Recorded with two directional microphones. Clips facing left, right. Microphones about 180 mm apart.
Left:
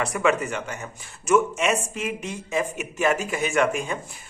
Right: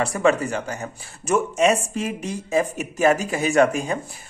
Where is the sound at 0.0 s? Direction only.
30° right (ahead or behind).